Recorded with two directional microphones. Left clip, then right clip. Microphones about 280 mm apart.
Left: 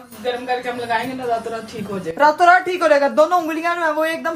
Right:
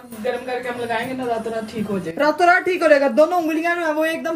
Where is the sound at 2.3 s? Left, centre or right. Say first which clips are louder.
Even; left.